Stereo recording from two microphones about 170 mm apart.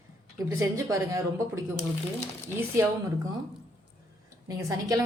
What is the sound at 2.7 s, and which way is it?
Speech, 15° right (ahead or behind).